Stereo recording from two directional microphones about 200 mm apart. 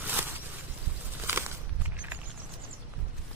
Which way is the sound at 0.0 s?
10° right (ahead or behind).